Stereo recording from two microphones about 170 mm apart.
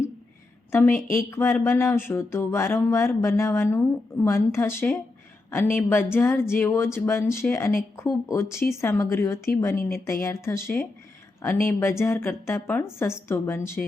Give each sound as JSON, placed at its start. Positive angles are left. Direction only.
{"t": 0.7, "sound": "a woman's voice", "side_deg": 15}